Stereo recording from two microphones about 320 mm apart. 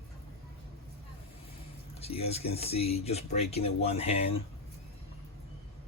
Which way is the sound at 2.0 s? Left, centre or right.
Centre.